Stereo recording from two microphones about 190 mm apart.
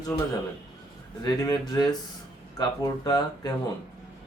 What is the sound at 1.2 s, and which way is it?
Speech, 20° left (ahead or behind).